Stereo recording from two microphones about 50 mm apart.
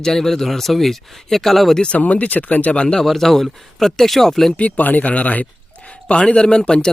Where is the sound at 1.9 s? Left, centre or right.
Left.